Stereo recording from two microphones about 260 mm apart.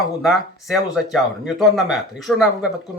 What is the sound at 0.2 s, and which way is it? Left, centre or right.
Speech, centre.